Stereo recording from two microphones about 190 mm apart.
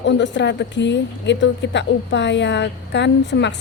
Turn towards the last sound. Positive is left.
turn(degrees=65)  # may be behind; listen again after turning